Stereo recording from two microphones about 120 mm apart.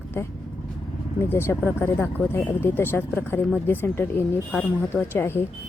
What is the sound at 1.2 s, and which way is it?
Speech, 20° left (ahead or behind).